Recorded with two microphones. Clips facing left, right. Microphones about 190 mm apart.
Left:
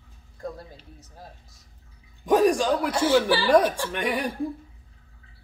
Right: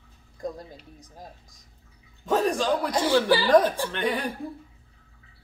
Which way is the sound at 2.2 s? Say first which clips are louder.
Left 4 dB; 15° left (ahead or behind).